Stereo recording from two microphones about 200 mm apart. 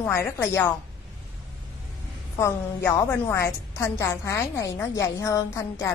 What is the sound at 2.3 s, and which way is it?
A woman's voice, 15° left (ahead or behind).